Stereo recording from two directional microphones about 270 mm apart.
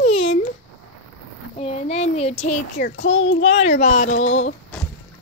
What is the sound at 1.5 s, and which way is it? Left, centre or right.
Speech, left.